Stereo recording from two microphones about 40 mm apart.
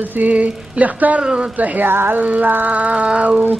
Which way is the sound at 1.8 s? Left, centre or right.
Right.